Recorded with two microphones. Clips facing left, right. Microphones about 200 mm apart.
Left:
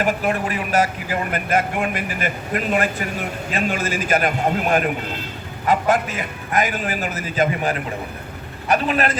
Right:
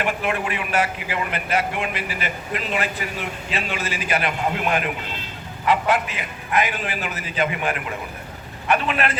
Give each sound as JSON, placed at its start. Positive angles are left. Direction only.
{"t": 0.0, "sound": "a man's voice", "side_deg": 40}